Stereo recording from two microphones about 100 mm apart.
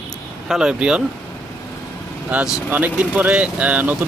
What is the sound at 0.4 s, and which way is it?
Speech, 5° right (ahead or behind).